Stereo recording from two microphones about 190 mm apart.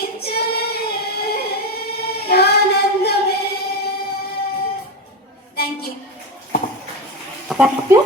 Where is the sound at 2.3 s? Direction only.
55° left (ahead or behind).